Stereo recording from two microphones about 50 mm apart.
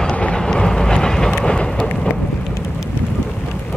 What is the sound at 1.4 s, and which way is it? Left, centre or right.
Thunder, centre.